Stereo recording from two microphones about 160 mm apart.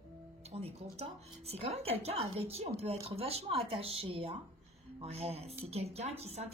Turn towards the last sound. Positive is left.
turn(degrees=-40)  # may be behind; listen again after turning